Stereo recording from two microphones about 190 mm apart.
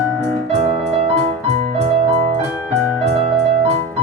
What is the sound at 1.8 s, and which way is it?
Music, 30° right (ahead or behind).